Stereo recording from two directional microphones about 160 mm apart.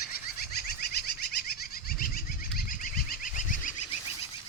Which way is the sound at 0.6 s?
75° left (ahead or behind).